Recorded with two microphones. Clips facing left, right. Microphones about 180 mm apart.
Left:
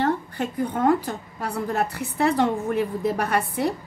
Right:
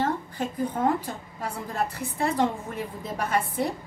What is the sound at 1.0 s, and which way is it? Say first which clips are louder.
A woman's voice: left 4 dB; 70° left (ahead or behind).